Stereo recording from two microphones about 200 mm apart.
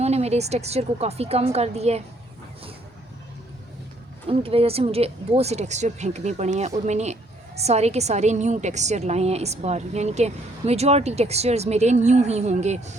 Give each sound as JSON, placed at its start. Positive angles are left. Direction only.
{"t": 0.0, "sound": "speech", "side_deg": -30}
{"t": 4.3, "sound": "speech", "side_deg": -30}